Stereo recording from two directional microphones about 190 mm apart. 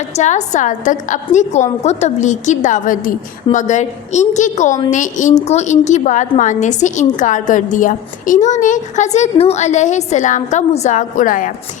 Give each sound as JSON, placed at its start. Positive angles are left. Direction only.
{"t": 0.2, "sound": "a woman's voice", "side_deg": 40}